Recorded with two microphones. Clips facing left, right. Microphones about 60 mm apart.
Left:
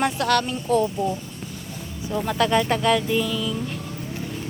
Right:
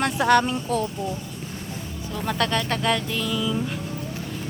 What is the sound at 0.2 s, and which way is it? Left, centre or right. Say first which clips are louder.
Speech: right 3 dB; centre.